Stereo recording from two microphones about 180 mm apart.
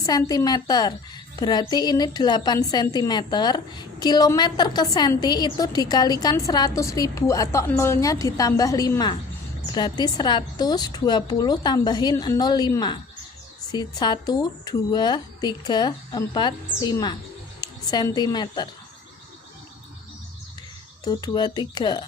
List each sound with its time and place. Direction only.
0.0 s a woman's voice: 20° left (ahead or behind)
21.0 s a woman's voice: 20° left (ahead or behind)